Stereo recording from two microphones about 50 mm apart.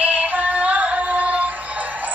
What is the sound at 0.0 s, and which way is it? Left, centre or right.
Music, right.